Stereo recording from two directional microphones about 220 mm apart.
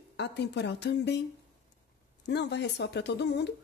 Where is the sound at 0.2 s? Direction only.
50° left (ahead or behind).